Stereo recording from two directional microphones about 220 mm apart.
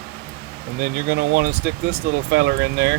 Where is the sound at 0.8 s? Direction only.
50° right (ahead or behind).